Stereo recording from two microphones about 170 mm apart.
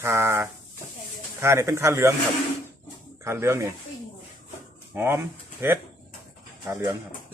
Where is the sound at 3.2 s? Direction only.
15° right (ahead or behind).